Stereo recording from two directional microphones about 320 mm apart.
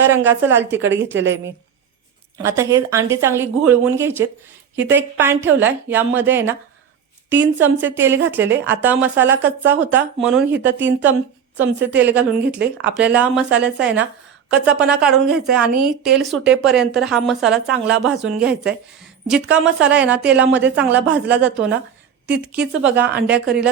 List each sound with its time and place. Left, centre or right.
0.1 s speech: centre
1.2 s a woman's voice: right
2.4 s speech: centre
22.3 s a woman's voice: right
22.7 s speech: centre